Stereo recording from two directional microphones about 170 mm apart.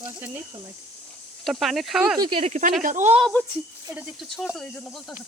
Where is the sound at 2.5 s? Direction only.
50° right (ahead or behind).